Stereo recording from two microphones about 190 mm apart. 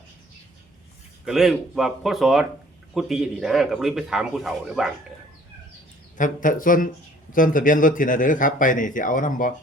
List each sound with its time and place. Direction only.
1.2 s speech: centre (ahead or behind)
6.1 s speech: 45° left (ahead or behind)